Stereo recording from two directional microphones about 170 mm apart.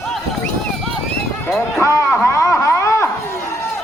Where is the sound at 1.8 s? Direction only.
15° left (ahead or behind).